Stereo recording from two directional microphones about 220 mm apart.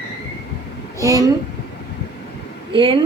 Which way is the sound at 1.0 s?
15° right (ahead or behind).